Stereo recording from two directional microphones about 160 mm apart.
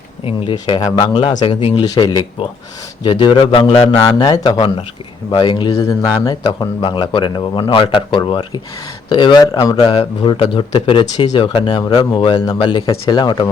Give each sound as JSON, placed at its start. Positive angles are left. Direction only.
{"t": 0.3, "sound": "speech", "side_deg": 35}